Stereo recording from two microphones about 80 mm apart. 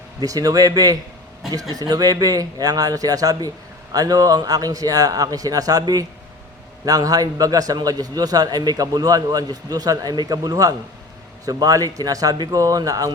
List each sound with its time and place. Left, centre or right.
0.2 s a man's voice: right